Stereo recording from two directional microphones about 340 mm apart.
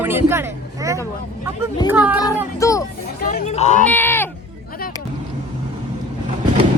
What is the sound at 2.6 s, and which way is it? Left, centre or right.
A woman's voice, centre.